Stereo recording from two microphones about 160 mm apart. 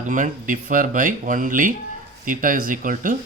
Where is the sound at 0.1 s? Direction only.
55° right (ahead or behind).